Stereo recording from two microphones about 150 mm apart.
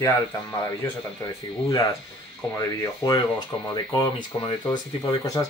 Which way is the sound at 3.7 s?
30° left (ahead or behind).